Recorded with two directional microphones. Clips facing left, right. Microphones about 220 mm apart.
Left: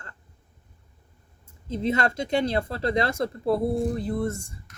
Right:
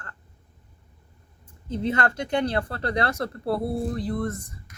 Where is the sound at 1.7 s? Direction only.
25° left (ahead or behind).